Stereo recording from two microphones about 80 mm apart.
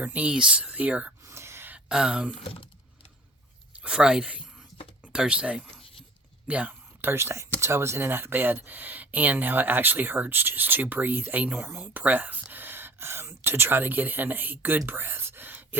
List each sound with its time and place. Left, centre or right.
0.0 s speech: centre
1.2 s a sound: right
1.9 s speech: centre
3.8 s speech: centre
14.8 s whispering: right